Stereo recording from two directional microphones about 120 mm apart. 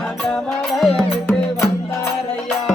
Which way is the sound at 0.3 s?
5° left (ahead or behind).